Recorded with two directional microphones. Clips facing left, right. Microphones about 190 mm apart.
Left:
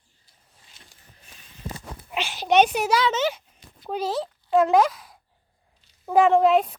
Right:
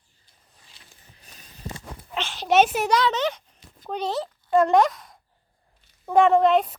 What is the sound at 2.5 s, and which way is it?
Speech, centre (ahead or behind).